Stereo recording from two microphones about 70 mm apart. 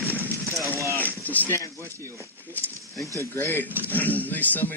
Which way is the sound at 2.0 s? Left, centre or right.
Right.